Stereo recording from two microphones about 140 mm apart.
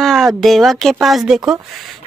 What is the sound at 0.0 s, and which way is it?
Speech, centre (ahead or behind).